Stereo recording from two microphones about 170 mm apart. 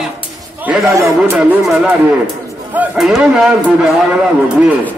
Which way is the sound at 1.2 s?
5° right (ahead or behind).